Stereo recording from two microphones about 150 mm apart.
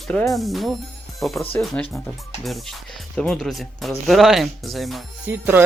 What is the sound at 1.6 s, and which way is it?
Speech, 15° left (ahead or behind).